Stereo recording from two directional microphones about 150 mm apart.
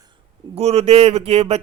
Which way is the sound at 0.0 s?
30° right (ahead or behind).